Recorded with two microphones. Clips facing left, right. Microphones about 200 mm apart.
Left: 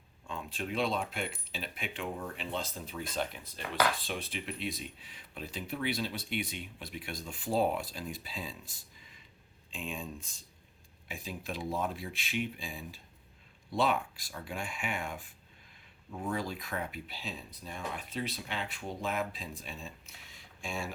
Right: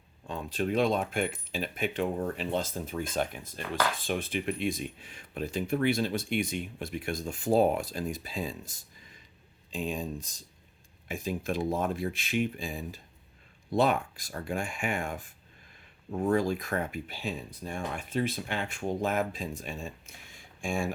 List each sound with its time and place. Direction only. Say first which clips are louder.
0.3 s speech: right 7 dB; 40° right (ahead or behind)